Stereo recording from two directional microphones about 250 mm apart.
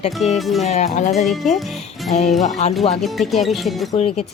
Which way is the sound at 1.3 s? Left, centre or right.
Centre.